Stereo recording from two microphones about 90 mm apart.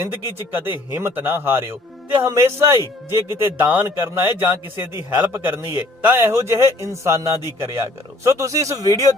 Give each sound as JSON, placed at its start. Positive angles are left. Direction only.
{"t": 0.0, "sound": "a man's voice", "side_deg": -25}